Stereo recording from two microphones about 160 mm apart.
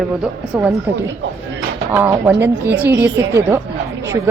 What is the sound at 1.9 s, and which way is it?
A woman's voice, 15° right (ahead or behind).